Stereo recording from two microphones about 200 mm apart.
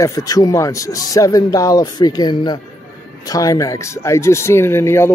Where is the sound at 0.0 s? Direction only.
15° left (ahead or behind).